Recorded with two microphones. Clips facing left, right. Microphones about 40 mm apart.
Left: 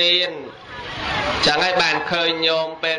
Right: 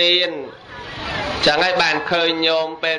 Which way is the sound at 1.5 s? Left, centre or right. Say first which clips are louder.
Right 3 dB; centre.